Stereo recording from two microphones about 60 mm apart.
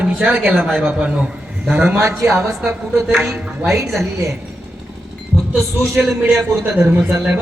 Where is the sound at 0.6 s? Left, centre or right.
Centre.